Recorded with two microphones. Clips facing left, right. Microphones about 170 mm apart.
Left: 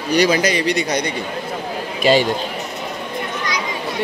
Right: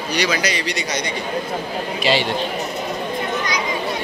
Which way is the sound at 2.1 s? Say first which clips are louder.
Left 5 dB; 45° left (ahead or behind).